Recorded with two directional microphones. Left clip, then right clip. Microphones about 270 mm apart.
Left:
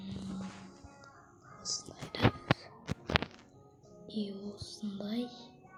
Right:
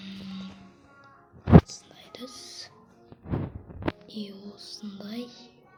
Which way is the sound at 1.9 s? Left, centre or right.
Centre.